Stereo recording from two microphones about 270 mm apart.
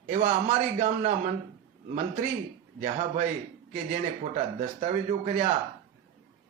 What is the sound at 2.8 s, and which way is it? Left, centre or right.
Speech, right.